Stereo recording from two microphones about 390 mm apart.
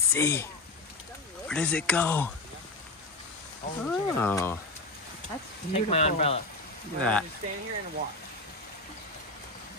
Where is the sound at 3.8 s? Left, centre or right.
Centre.